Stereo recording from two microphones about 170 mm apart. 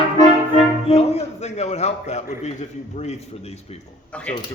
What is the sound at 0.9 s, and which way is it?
A man's voice, 40° left (ahead or behind).